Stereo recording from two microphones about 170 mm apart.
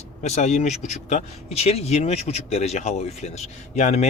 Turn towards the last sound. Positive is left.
turn(degrees=40)  # may be behind; listen again after turning